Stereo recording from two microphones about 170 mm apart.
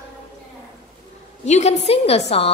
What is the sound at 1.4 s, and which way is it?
A woman's voice, 45° left (ahead or behind).